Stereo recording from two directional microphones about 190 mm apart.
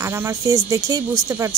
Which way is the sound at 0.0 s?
10° right (ahead or behind).